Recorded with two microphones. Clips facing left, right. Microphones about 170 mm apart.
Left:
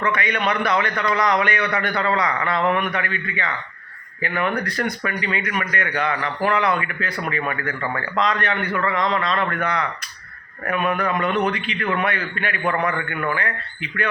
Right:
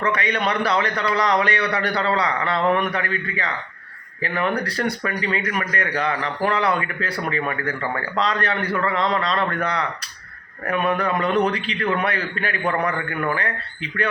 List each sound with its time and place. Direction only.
0.0 s speech: 35° right (ahead or behind)